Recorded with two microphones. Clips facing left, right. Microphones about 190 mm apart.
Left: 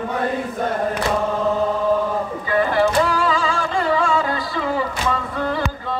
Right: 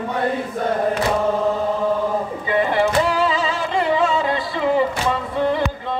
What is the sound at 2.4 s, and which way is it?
Music, 25° right (ahead or behind).